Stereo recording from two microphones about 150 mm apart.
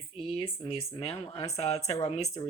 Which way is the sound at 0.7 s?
40° left (ahead or behind).